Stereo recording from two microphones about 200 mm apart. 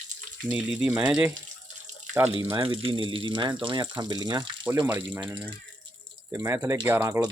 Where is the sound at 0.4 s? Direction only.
5° right (ahead or behind).